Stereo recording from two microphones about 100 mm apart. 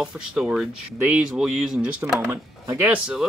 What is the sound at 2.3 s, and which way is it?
Speech, 20° right (ahead or behind).